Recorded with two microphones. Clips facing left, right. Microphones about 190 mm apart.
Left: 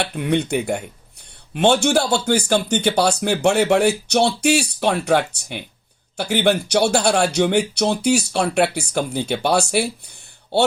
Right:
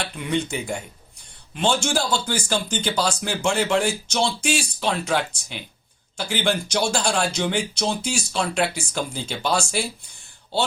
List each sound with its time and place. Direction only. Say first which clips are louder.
0.0 s speech: left 5 dB; 60° left (ahead or behind)